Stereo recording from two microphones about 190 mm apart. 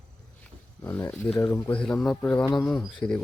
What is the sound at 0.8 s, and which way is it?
Speech, 10° left (ahead or behind).